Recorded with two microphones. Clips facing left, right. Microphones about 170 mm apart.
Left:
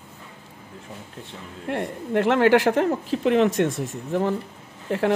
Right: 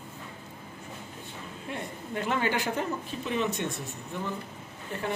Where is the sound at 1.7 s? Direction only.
80° left.